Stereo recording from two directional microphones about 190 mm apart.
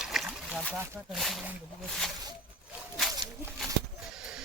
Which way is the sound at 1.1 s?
Centre (ahead or behind).